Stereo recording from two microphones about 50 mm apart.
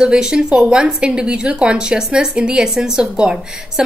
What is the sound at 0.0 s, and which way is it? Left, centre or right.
Speech, centre.